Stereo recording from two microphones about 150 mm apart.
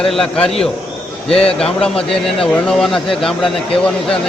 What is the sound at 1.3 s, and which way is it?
Speech, 40° left (ahead or behind).